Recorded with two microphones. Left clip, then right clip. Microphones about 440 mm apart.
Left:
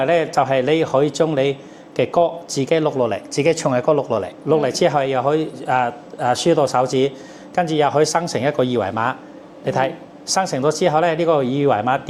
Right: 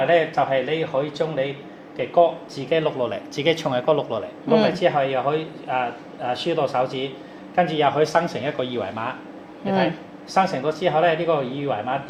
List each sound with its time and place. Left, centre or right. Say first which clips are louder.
0.0 s a man's voice: left 2 dB; left
4.7 s a man's voice: left 3 dB; left
10.2 s a man's voice: left 2 dB; left